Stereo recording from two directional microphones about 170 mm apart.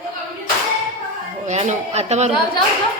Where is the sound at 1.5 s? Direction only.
40° right (ahead or behind).